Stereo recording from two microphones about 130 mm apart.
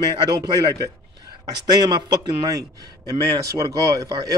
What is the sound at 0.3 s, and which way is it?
Speech, 30° right (ahead or behind).